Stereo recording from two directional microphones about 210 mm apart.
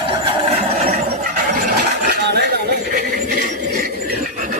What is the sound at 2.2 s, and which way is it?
Chatter, 50° right (ahead or behind).